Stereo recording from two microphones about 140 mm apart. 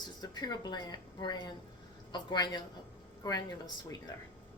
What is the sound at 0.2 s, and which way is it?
A woman's voice, 30° left (ahead or behind).